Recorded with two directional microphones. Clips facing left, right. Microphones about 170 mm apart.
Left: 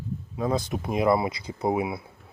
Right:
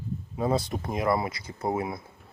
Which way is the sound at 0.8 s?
15° left (ahead or behind).